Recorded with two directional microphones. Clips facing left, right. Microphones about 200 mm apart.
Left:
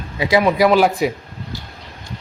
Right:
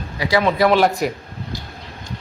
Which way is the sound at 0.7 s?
Centre (ahead or behind).